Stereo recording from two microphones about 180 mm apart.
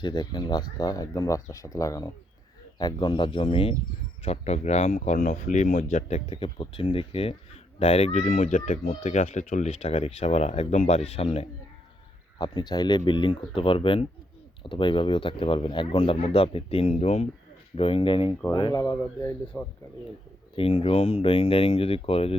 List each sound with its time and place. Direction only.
0.0 s speech: 25° left (ahead or behind)
12.4 s speech: 25° left (ahead or behind)
18.8 s speech: 15° left (ahead or behind)
20.6 s speech: 35° left (ahead or behind)